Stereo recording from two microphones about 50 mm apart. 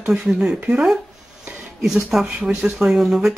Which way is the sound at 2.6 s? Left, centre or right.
Centre.